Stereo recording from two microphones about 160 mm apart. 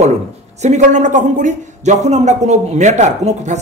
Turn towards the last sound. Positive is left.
turn(degrees=-45)  # may be behind; listen again after turning